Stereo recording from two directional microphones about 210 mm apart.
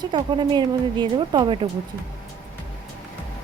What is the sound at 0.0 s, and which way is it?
Speech, 20° right (ahead or behind).